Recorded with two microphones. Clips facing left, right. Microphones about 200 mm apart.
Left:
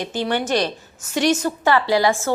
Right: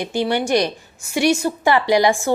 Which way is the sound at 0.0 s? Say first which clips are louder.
Right 2 dB; 10° right (ahead or behind).